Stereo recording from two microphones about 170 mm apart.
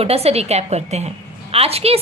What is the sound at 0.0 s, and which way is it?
A woman's voice, 35° right (ahead or behind).